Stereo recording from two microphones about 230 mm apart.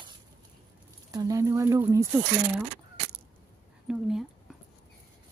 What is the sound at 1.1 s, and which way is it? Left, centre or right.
Speech, centre.